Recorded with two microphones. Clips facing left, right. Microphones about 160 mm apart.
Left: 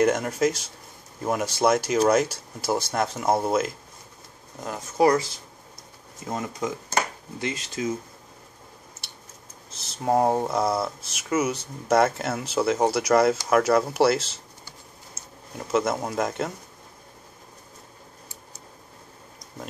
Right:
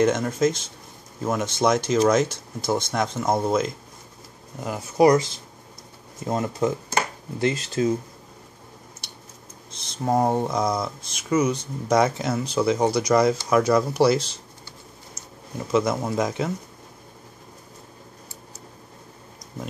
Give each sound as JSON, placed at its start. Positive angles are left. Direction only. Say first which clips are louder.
{"t": 0.0, "sound": "speech", "louder": "right 1 dB", "side_deg": 10}
{"t": 4.6, "sound": "speech", "louder": "right 3 dB", "side_deg": -10}
{"t": 7.3, "sound": "speech", "louder": "right 7 dB", "side_deg": -35}
{"t": 9.0, "sound": "a sound", "louder": "right 3 dB", "side_deg": 0}
{"t": 10.0, "sound": "speech", "louder": "even", "side_deg": 5}
{"t": 15.7, "sound": "speech", "louder": "right 2 dB", "side_deg": 5}